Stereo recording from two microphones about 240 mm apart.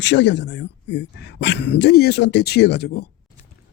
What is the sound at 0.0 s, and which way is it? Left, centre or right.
Speech, left.